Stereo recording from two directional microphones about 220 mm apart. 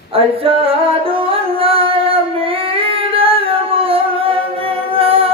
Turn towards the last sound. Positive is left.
turn(degrees=-25)  # may be behind; listen again after turning